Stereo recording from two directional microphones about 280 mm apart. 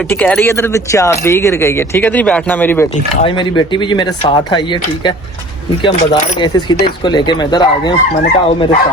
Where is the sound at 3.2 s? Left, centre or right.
Centre.